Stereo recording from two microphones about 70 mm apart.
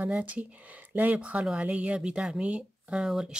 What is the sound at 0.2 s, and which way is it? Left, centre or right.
Speech, right.